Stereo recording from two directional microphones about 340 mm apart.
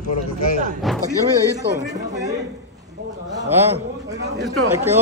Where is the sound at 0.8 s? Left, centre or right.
Centre.